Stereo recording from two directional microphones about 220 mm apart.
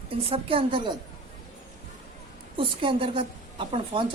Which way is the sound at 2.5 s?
25° right (ahead or behind).